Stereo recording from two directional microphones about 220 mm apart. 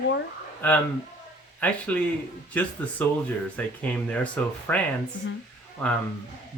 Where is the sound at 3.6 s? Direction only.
5° left (ahead or behind).